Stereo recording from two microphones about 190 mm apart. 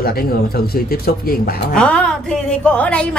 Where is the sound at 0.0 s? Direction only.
50° left (ahead or behind).